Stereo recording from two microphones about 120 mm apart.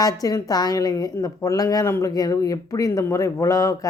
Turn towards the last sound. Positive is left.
turn(degrees=25)  # may be behind; listen again after turning